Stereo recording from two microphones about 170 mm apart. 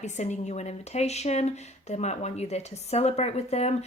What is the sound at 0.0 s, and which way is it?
Speech, 40° left (ahead or behind).